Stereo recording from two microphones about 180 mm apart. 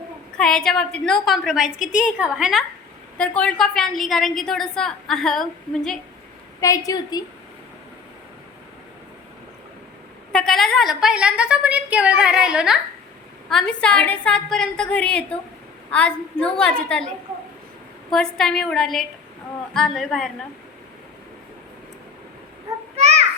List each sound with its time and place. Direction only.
0.3 s a woman's voice: 5° left (ahead or behind)
6.6 s a woman's voice: 20° left (ahead or behind)
10.3 s a woman's voice: centre (ahead or behind)
18.1 s a woman's voice: 5° left (ahead or behind)
23.0 s a sound: 40° right (ahead or behind)